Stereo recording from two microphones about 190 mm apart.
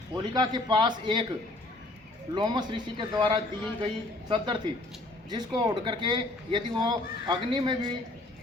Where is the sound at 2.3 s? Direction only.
25° right (ahead or behind).